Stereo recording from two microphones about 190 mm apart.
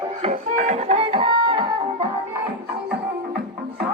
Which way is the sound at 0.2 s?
40° right (ahead or behind).